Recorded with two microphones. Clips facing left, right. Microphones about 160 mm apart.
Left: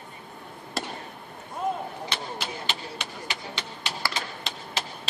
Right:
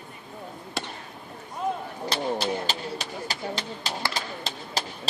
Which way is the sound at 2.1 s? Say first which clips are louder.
Right 7 dB; 35° right (ahead or behind).